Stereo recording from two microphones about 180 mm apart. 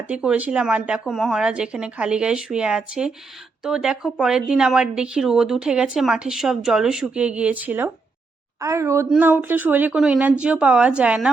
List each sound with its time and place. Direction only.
0.1 s a woman's voice: 5° right (ahead or behind)